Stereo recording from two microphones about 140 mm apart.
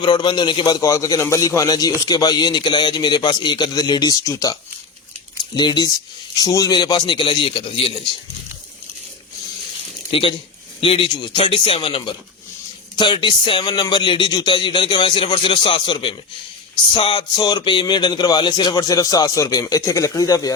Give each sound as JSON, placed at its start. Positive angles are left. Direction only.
{"t": 0.0, "sound": "a man's voice", "side_deg": 35}
{"t": 5.5, "sound": "speech", "side_deg": 30}
{"t": 10.1, "sound": "a man's voice", "side_deg": 40}